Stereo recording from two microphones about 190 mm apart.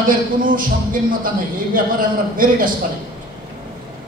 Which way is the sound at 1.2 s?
45° right (ahead or behind).